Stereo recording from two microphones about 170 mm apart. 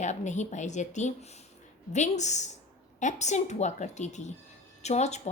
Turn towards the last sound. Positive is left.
turn(degrees=40)  # may be behind; listen again after turning